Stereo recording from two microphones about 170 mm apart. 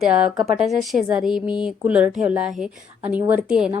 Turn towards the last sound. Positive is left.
turn(degrees=-5)  # may be behind; listen again after turning